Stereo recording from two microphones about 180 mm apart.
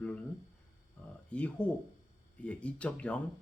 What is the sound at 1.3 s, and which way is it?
Speech, 5° left (ahead or behind).